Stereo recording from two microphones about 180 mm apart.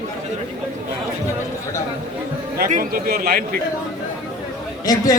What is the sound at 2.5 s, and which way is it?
A man's voice, 50° right (ahead or behind).